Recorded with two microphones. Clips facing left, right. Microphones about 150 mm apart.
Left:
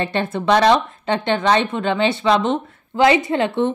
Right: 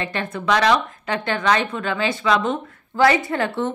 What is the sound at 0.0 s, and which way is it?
A woman's voice, 30° left (ahead or behind).